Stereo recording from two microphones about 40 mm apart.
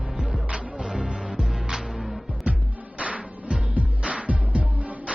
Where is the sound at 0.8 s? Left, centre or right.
Centre.